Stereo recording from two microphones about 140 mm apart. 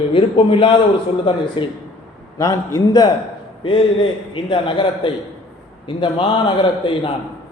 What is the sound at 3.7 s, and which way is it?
A man's voice, 40° left (ahead or behind).